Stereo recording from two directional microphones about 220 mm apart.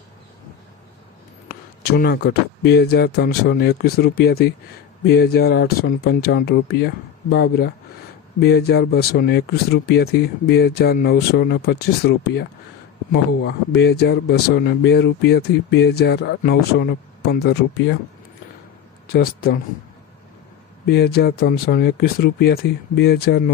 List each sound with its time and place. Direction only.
1.5 s speech: 45° left (ahead or behind)
19.1 s speech: 45° left (ahead or behind)
20.8 s speech: 45° left (ahead or behind)